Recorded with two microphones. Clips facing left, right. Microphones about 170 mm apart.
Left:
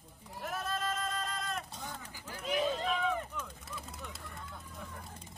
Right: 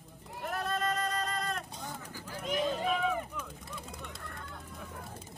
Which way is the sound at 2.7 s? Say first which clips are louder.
Right 2 dB; 5° right (ahead or behind).